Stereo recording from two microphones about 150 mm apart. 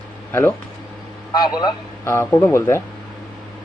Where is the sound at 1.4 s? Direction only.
30° left (ahead or behind).